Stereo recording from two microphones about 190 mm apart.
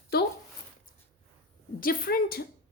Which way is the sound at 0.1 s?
55° left (ahead or behind).